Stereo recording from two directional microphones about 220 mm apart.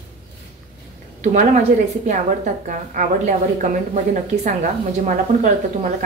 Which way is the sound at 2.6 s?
35° right (ahead or behind).